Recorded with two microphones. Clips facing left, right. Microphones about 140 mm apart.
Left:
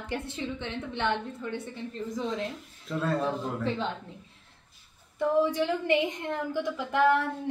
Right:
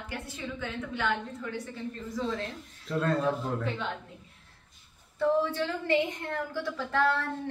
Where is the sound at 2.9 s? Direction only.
Centre (ahead or behind).